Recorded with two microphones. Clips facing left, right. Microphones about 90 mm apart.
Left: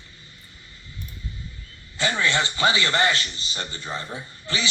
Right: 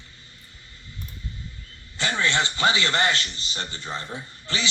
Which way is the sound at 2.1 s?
10° left (ahead or behind).